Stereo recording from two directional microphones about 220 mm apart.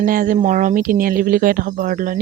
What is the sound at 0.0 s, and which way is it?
Speech, 40° right (ahead or behind).